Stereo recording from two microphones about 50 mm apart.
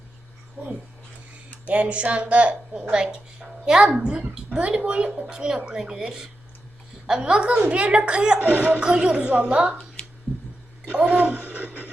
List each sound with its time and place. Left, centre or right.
0.6 s a woman's voice: right
8.4 s speech: right
8.8 s a woman's voice: centre
10.9 s speech: right